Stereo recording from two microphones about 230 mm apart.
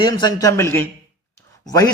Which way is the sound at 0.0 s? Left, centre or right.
Centre.